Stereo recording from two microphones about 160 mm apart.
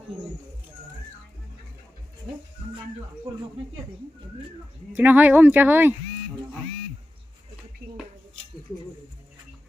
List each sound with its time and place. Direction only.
4.9 s speech: 10° right (ahead or behind)
7.8 s dishes: 90° right